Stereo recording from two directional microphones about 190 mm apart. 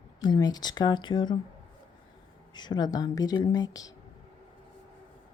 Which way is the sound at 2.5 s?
25° left (ahead or behind).